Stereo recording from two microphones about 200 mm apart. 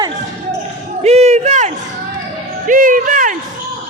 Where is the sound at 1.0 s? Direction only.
35° right (ahead or behind).